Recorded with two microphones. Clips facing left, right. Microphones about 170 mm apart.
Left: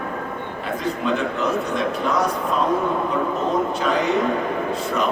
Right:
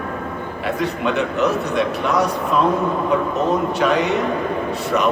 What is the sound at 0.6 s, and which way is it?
A man's voice, 70° right (ahead or behind).